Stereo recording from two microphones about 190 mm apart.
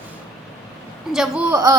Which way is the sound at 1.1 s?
5° right (ahead or behind).